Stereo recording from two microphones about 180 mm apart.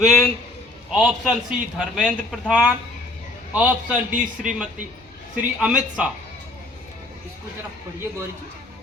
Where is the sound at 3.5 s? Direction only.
10° right (ahead or behind).